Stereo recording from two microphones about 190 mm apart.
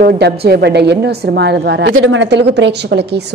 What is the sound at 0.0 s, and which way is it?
A woman's voice, 55° right (ahead or behind).